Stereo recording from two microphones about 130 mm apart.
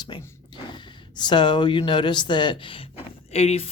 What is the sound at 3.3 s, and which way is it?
Speech, 55° left (ahead or behind).